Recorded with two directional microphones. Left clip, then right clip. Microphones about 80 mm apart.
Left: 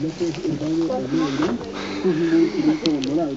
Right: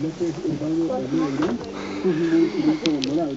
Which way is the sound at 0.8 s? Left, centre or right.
Centre.